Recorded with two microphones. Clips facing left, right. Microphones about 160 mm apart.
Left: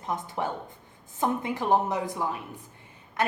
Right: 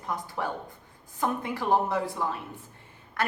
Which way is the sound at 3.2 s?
20° left (ahead or behind).